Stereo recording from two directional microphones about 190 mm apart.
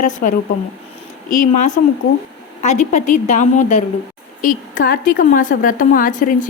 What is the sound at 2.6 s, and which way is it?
A woman's voice, 35° left (ahead or behind).